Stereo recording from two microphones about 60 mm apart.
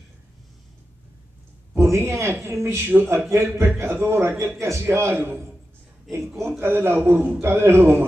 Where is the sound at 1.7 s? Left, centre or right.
Right.